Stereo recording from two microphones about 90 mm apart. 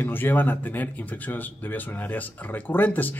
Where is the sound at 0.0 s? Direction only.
20° left (ahead or behind).